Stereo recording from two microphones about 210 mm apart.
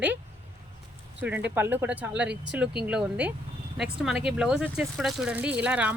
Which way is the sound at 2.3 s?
55° right (ahead or behind).